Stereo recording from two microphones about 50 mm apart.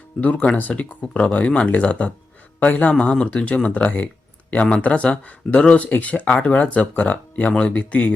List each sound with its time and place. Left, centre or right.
0.2 s a man's voice: left